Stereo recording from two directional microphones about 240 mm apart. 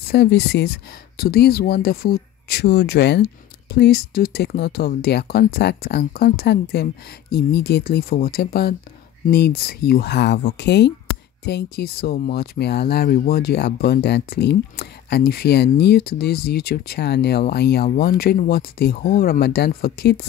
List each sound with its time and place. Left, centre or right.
0.1 s speech: left